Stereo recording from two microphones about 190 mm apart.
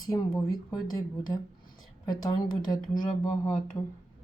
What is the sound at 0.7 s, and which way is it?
A woman's voice, 20° left (ahead or behind).